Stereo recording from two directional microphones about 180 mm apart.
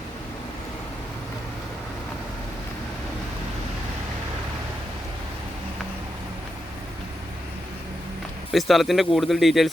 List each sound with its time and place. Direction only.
8.5 s speech: centre (ahead or behind)